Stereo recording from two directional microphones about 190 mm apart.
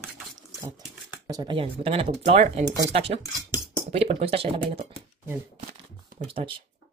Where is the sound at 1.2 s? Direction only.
20° right (ahead or behind).